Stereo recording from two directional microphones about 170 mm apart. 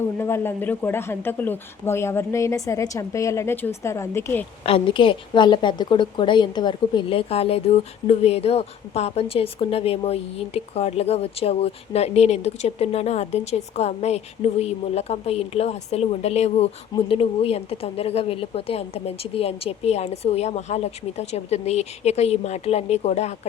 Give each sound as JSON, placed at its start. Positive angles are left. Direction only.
{"t": 0.0, "sound": "speech", "side_deg": 15}
{"t": 4.6, "sound": "a woman's voice", "side_deg": 30}